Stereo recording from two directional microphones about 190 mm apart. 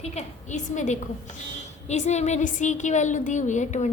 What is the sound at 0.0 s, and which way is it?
A woman's voice, 35° left (ahead or behind).